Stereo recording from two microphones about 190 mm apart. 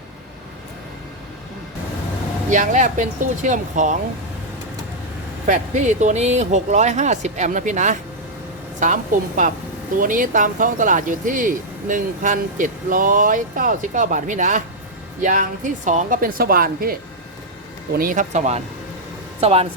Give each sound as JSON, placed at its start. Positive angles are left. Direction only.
{"t": 2.5, "sound": "speech", "side_deg": -40}
{"t": 5.5, "sound": "speech", "side_deg": -40}
{"t": 17.9, "sound": "speech", "side_deg": -45}